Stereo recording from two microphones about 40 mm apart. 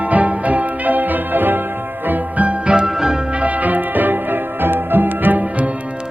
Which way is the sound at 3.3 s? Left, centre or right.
Right.